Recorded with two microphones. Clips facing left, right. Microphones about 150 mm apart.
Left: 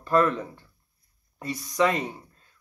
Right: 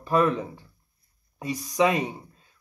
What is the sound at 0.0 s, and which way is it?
Speech, 15° right (ahead or behind).